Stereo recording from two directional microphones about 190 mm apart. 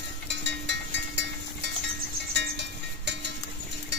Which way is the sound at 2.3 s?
65° right (ahead or behind).